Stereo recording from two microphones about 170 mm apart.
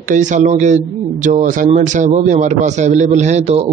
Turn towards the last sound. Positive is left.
turn(degrees=-40)  # may be behind; listen again after turning